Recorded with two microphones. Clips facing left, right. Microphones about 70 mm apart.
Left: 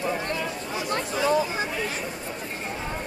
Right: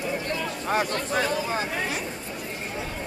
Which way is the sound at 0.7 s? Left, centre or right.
Right.